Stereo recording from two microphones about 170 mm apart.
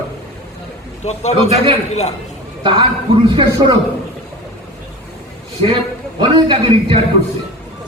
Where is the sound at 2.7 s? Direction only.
25° right (ahead or behind).